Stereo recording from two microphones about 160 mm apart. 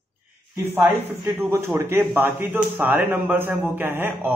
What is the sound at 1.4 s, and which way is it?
Speech, 15° right (ahead or behind).